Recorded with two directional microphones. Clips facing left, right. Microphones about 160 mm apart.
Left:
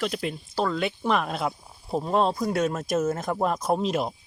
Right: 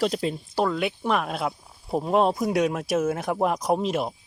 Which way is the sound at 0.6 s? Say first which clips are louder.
Right 1 dB; 5° right (ahead or behind).